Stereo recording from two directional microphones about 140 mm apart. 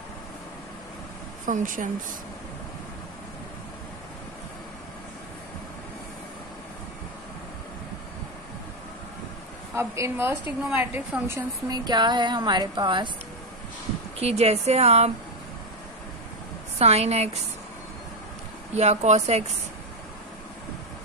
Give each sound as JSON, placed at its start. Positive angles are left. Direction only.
{"t": 1.4, "sound": "speech", "side_deg": -65}
{"t": 9.8, "sound": "a woman's voice", "side_deg": -20}
{"t": 11.7, "sound": "a woman's voice", "side_deg": -30}
{"t": 14.2, "sound": "a woman's voice", "side_deg": -50}
{"t": 16.7, "sound": "a woman's voice", "side_deg": -50}
{"t": 18.8, "sound": "a woman's voice", "side_deg": -50}